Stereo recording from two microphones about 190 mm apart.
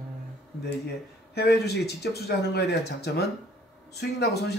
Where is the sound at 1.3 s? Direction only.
60° left (ahead or behind).